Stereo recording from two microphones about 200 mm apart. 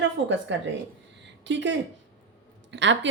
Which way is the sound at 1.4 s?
65° right (ahead or behind).